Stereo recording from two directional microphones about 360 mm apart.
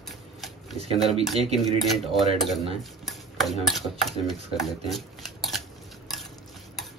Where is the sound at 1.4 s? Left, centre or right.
Centre.